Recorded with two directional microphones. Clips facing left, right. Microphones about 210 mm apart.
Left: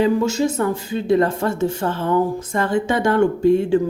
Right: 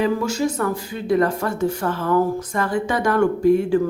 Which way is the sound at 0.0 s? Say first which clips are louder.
Left 3 dB; 25° left (ahead or behind).